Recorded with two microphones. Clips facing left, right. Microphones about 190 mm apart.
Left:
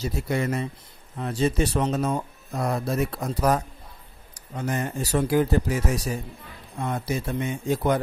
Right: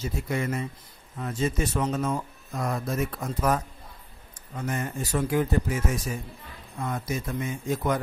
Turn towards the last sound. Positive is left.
turn(degrees=30)  # may be behind; listen again after turning